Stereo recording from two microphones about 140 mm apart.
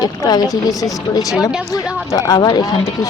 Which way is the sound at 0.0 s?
25° left (ahead or behind).